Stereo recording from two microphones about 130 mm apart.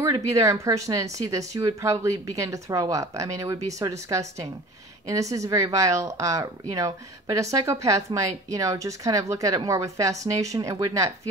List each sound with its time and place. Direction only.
0.0 s a woman's voice: 25° right (ahead or behind)